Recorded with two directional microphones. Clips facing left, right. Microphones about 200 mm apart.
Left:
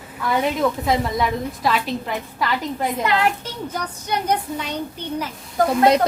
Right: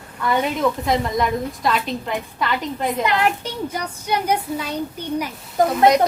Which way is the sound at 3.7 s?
10° right (ahead or behind).